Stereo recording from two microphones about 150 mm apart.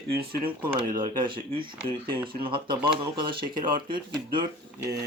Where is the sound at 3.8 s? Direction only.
30° right (ahead or behind).